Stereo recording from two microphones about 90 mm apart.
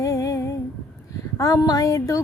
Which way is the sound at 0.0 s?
35° left (ahead or behind).